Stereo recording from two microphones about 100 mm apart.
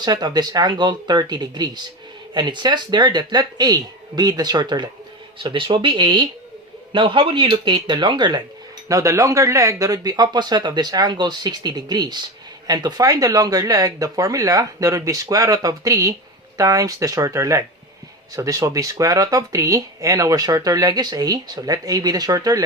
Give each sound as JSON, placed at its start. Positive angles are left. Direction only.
{"t": 0.0, "sound": "speech", "side_deg": -45}
{"t": 8.9, "sound": "speech", "side_deg": -30}